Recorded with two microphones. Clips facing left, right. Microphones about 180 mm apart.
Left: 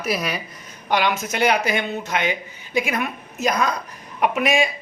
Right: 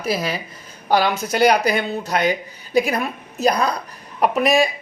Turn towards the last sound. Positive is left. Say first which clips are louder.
# right 3 dB
turn(degrees=-35)  # may be behind; listen again after turning